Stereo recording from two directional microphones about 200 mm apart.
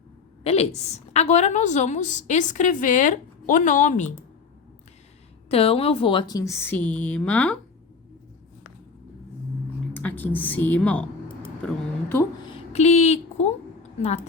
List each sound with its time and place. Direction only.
0.4 s a woman's voice: 30° left (ahead or behind)
5.5 s a woman's voice: 30° left (ahead or behind); by 7.6 s 5° left (ahead or behind)
9.9 s a woman's voice: 10° left (ahead or behind)
12.5 s speech: 30° left (ahead or behind)